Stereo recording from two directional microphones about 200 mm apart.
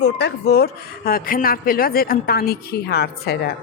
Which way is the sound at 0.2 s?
55° left (ahead or behind).